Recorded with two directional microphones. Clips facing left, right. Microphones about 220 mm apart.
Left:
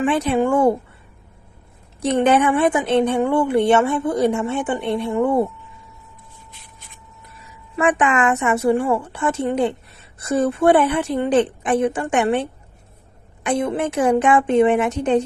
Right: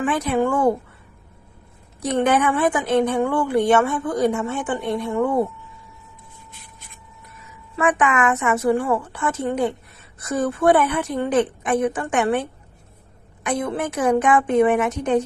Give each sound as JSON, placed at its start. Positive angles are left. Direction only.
{"t": 0.0, "sound": "a woman's voice", "side_deg": 30}
{"t": 2.0, "sound": "a woman's voice", "side_deg": 25}
{"t": 7.8, "sound": "a woman's voice", "side_deg": 30}